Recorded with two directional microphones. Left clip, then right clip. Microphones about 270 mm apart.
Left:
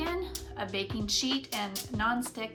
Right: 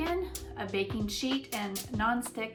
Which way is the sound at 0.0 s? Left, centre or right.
Centre.